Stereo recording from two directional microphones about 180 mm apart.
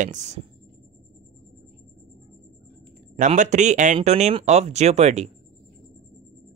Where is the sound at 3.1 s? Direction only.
45° right (ahead or behind).